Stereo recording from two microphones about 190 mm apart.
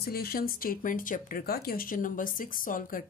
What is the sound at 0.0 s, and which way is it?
Speech, 55° left (ahead or behind).